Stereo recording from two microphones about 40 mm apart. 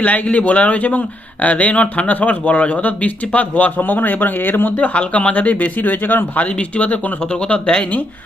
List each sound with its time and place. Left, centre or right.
0.0 s speech: left
4.8 s speech: left
6.3 s speech: left